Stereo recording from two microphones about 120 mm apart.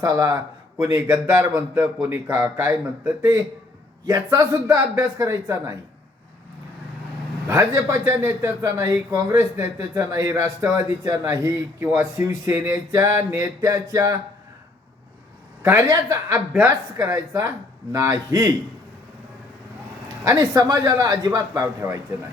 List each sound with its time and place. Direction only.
0.0 s a man's voice: 30° right (ahead or behind)
2.0 s a man's voice: 15° right (ahead or behind)
4.0 s a man's voice: 30° right (ahead or behind)
7.4 s a man's voice: 25° right (ahead or behind)
15.9 s a man's voice: 30° right (ahead or behind)
20.2 s speech: 30° right (ahead or behind)